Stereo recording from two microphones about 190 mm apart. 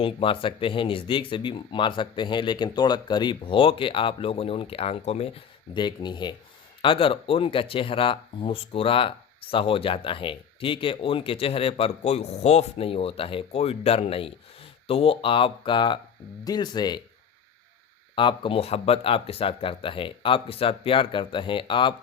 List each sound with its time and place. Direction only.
0.0 s speech: 30° left (ahead or behind)
18.1 s speech: 25° left (ahead or behind)